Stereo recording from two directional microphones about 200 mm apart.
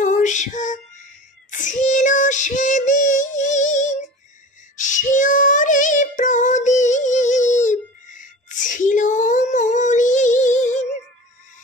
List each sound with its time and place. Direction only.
0.0 s music: 40° left (ahead or behind)
1.5 s female singing: 40° left (ahead or behind)
4.7 s child singing: 40° left (ahead or behind)